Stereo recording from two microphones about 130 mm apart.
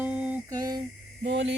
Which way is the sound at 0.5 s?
30° right (ahead or behind).